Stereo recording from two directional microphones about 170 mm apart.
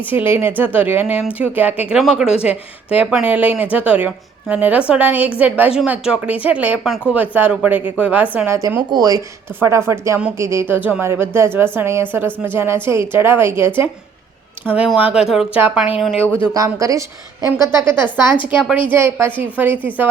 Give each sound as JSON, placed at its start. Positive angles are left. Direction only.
{"t": 0.0, "sound": "speech", "side_deg": -10}
{"t": 14.9, "sound": "speech", "side_deg": -5}
{"t": 16.6, "sound": "speech", "side_deg": -20}